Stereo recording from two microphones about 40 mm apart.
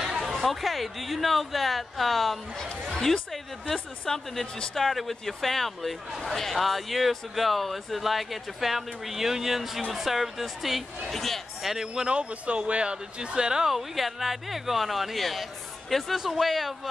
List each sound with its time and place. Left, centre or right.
0.2 s speech: centre
4.7 s speech: centre
11.7 s speech: centre
12.1 s speech: right
13.7 s speech: centre